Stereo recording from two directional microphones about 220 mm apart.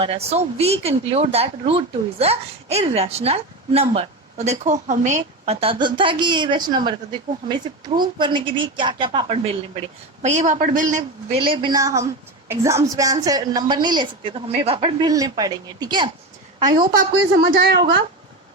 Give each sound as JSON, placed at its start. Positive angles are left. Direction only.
{"t": 0.0, "sound": "a man's voice", "side_deg": -25}
{"t": 11.3, "sound": "speech", "side_deg": -20}
{"t": 17.5, "sound": "a woman's voice", "side_deg": -45}